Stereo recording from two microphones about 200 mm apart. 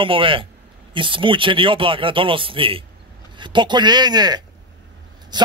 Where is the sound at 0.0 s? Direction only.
25° right (ahead or behind).